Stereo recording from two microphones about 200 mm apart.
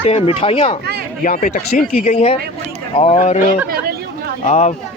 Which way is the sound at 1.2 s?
45° left (ahead or behind).